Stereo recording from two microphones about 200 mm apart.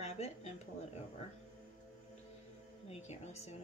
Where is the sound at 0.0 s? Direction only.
35° left (ahead or behind).